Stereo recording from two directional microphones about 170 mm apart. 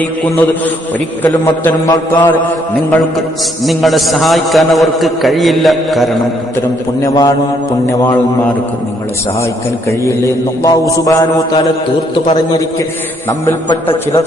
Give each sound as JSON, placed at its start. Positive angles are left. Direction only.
{"t": 1.3, "sound": "mantra", "side_deg": 20}
{"t": 3.7, "sound": "a man's voice", "side_deg": 0}
{"t": 7.0, "sound": "mantra", "side_deg": 20}
{"t": 10.0, "sound": "mantra", "side_deg": 15}